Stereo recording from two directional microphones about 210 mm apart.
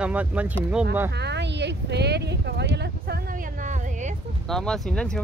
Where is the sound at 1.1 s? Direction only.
55° right (ahead or behind); by 4.2 s 35° right (ahead or behind).